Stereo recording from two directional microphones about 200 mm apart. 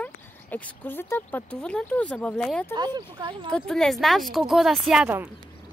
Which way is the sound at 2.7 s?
20° right (ahead or behind).